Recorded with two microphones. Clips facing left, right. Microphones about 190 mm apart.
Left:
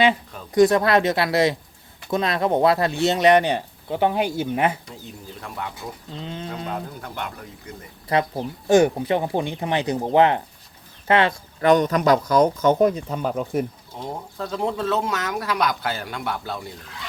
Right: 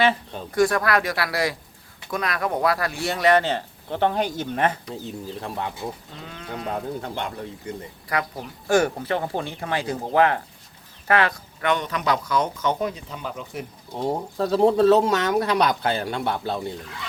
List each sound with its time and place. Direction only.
0.5 s speech: 20° left (ahead or behind)
5.4 s speech: 30° right (ahead or behind)
6.2 s speech: 25° left (ahead or behind)
6.7 s speech: 25° right (ahead or behind)
8.1 s speech: 25° left (ahead or behind)
11.7 s speech: 45° left (ahead or behind)
13.9 s speech: 35° right (ahead or behind)